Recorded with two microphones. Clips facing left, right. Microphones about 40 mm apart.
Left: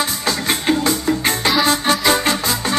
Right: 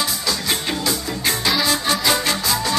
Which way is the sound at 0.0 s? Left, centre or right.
Left.